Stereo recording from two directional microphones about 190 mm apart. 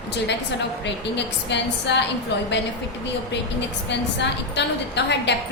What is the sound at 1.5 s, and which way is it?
A woman's voice, 65° left (ahead or behind).